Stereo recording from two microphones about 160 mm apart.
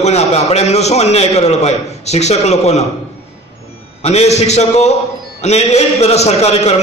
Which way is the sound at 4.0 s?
40° left (ahead or behind).